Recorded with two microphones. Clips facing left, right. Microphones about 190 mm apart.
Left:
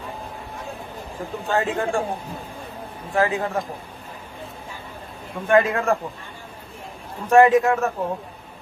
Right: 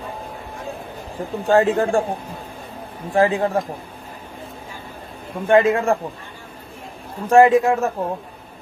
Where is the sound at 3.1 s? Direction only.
35° right (ahead or behind).